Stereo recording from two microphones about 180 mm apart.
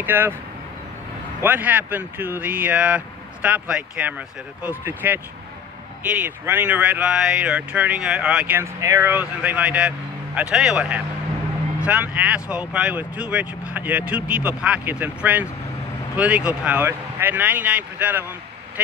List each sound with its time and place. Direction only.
0.0 s speech: 10° right (ahead or behind)
1.4 s speech: 10° right (ahead or behind)